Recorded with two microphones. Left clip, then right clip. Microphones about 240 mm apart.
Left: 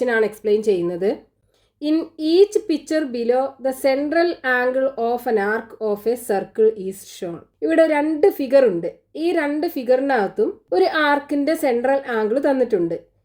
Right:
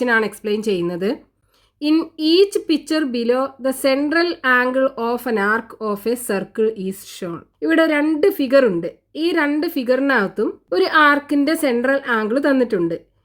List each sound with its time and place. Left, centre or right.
0.0 s speech: right